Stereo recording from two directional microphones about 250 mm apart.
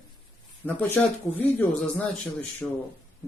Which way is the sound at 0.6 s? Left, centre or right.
Centre.